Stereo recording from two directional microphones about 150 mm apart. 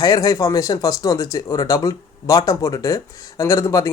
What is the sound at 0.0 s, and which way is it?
Speech, 25° left (ahead or behind).